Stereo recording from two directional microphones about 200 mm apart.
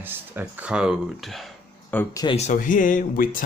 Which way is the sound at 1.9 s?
15° left (ahead or behind).